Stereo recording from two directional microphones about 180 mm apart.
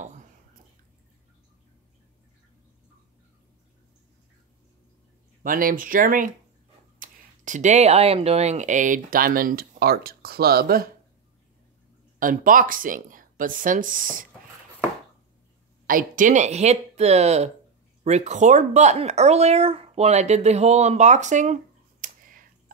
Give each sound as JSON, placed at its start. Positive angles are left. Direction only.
{"t": 0.0, "sound": "whispering", "side_deg": -40}
{"t": 5.4, "sound": "speech", "side_deg": -50}
{"t": 12.2, "sound": "speech", "side_deg": -50}
{"t": 15.9, "sound": "speech", "side_deg": -50}
{"t": 22.0, "sound": "clicking", "side_deg": -50}